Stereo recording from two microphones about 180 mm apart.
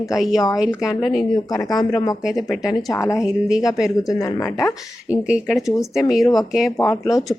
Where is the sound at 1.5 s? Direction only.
20° left (ahead or behind).